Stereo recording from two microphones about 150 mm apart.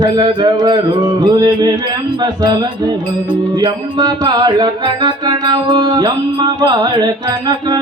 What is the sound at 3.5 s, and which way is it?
Music, 25° right (ahead or behind).